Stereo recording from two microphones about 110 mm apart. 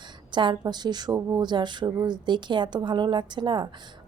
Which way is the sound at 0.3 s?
45° right (ahead or behind).